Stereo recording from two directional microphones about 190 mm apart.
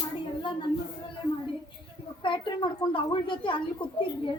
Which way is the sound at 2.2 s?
25° left (ahead or behind).